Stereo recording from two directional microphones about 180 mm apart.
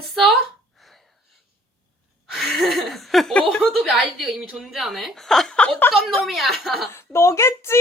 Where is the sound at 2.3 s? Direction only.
Centre (ahead or behind).